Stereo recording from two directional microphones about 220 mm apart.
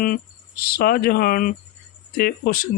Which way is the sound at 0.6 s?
40° left (ahead or behind).